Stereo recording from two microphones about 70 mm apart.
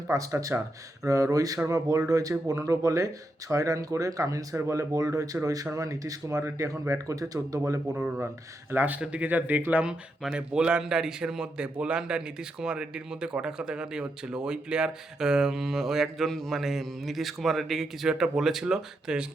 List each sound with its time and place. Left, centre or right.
0.1 s speech: right
4.5 s speech: right
8.7 s speech: right
10.3 s a man's voice: centre